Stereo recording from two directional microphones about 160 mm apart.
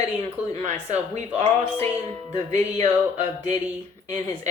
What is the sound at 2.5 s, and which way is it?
Speech, 45° right (ahead or behind).